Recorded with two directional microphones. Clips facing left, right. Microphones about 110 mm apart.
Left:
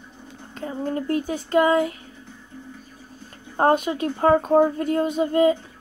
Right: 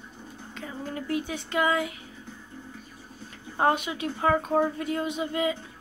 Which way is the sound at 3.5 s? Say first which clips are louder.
Left 5 dB; 40° left (ahead or behind).